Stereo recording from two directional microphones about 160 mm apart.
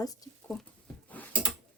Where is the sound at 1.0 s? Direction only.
10° left (ahead or behind).